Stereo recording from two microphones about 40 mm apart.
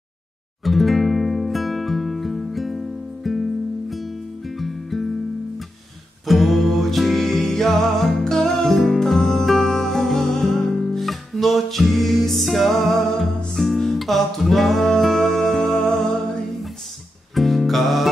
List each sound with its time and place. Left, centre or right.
0.7 s music: centre
6.2 s music: centre
17.3 s music: centre